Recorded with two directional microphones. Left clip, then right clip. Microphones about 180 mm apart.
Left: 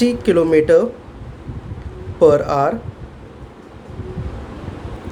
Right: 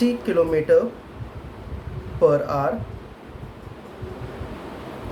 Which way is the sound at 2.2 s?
50° left (ahead or behind).